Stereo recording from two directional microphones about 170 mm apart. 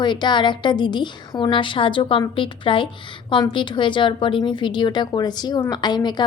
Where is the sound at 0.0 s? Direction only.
25° left (ahead or behind).